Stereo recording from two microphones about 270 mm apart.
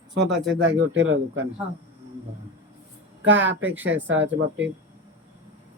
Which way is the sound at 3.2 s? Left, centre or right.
Right.